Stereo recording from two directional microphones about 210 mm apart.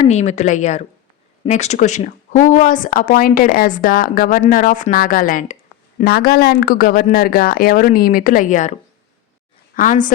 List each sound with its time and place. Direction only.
0.0 s speech: 35° left (ahead or behind)